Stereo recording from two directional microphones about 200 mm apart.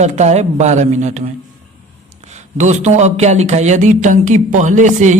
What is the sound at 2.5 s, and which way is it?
Speech, 35° right (ahead or behind).